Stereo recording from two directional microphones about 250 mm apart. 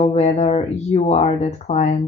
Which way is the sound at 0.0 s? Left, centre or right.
Left.